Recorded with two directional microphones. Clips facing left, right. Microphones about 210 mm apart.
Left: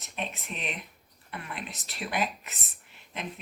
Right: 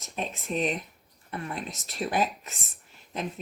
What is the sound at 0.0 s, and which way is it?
Speech, 40° right (ahead or behind).